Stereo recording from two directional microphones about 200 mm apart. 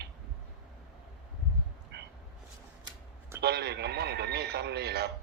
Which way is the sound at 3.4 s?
55° right (ahead or behind).